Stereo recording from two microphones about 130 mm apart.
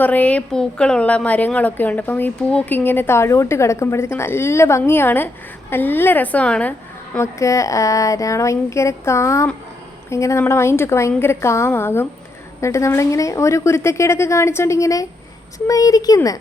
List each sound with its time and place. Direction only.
0.0 s a woman's voice: 10° left (ahead or behind); by 16.4 s 25° left (ahead or behind)